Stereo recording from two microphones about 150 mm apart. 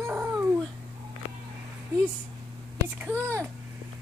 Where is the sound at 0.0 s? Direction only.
15° right (ahead or behind).